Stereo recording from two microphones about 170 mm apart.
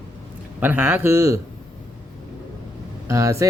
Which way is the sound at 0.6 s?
10° right (ahead or behind).